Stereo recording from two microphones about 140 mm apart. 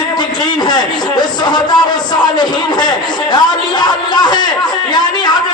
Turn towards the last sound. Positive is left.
turn(degrees=30)  # may be behind; listen again after turning